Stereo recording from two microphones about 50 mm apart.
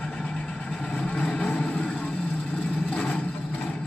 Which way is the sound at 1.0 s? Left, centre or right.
Left.